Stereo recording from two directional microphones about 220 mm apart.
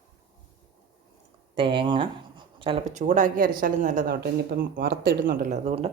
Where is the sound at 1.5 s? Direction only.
25° right (ahead or behind).